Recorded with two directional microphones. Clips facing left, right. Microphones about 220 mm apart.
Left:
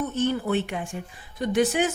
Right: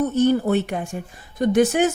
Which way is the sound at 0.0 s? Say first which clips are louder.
Right 7 dB; 40° right (ahead or behind).